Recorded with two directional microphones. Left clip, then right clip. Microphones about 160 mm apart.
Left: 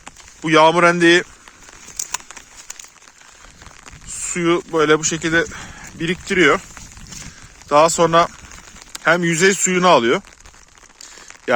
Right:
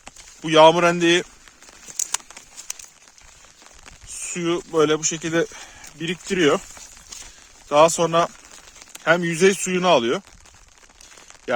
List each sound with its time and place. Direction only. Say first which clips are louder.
0.0 s speech: left 6 dB; 20° right (ahead or behind)
4.4 s speech: left 3 dB; 15° right (ahead or behind)
7.7 s speech: left 3 dB; 15° right (ahead or behind)